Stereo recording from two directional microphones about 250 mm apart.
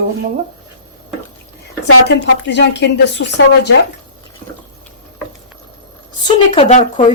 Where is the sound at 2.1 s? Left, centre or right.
Left.